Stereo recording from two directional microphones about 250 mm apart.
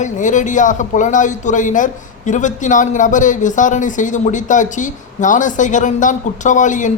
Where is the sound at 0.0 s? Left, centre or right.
Left.